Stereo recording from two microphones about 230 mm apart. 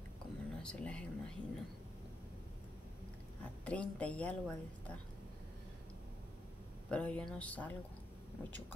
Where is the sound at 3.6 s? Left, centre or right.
Centre.